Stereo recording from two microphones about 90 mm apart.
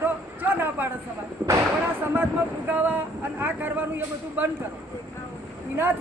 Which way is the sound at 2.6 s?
20° right (ahead or behind).